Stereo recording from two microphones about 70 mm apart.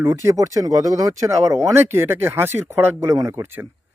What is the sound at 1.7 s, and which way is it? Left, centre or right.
Speech, right.